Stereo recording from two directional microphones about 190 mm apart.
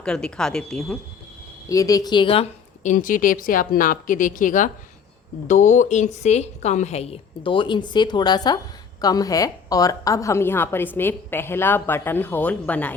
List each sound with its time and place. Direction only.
0.0 s speech: 5° left (ahead or behind)
1.7 s a woman's voice: 20° left (ahead or behind)